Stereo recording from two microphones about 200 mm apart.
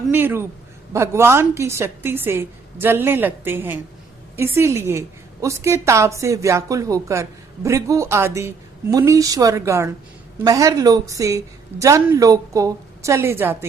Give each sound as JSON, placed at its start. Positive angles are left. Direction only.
{"t": 0.1, "sound": "a woman's voice", "side_deg": -10}